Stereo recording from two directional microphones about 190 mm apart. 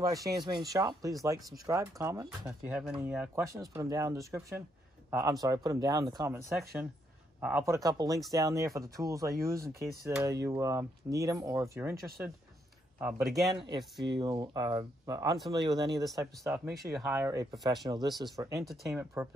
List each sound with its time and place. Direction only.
0.0 s speech: 20° right (ahead or behind)
13.6 s speech: 20° right (ahead or behind)
16.2 s speech: 10° right (ahead or behind)
18.1 s speech: centre (ahead or behind)
18.4 s speech: 15° right (ahead or behind)